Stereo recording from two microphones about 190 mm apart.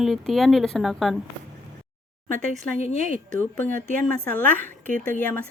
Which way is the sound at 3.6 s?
45° right (ahead or behind).